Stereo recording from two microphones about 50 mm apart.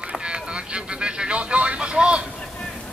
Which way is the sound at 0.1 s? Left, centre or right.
Centre.